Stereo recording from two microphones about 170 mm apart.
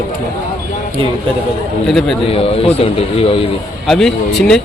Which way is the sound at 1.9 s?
Centre (ahead or behind).